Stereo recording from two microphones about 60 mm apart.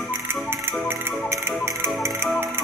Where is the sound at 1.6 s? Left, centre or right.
Right.